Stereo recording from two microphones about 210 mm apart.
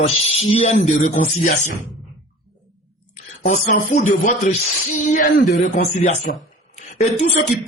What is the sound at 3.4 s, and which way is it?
Speech, 35° left (ahead or behind).